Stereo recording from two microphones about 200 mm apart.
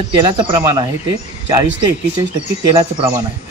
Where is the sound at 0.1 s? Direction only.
25° right (ahead or behind).